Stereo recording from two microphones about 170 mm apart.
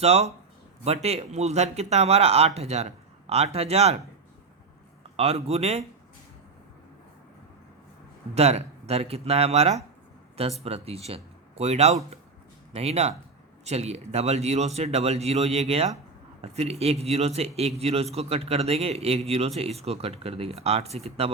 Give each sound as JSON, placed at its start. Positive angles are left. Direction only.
{"t": 0.0, "sound": "speech", "side_deg": -40}
{"t": 5.1, "sound": "speech", "side_deg": -35}
{"t": 8.4, "sound": "speech", "side_deg": -40}